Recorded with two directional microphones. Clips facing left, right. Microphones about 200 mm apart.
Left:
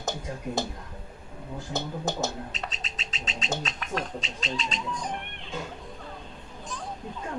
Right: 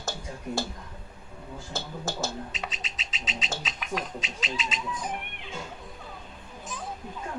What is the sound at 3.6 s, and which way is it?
Speech, centre (ahead or behind).